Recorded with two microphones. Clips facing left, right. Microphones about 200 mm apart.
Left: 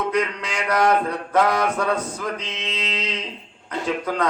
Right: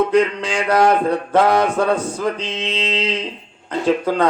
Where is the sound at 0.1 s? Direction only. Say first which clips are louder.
Right 7 dB; 30° right (ahead or behind).